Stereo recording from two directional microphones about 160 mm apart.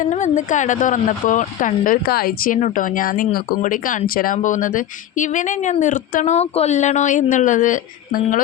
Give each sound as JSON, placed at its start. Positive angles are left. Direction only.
{"t": 0.0, "sound": "speech", "side_deg": 50}